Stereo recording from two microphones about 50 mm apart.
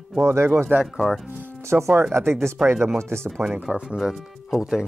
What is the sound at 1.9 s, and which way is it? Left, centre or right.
Speech, right.